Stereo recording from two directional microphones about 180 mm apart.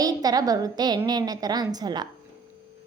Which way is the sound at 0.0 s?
20° right (ahead or behind).